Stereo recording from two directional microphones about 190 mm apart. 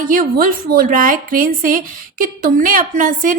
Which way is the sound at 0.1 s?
45° right (ahead or behind).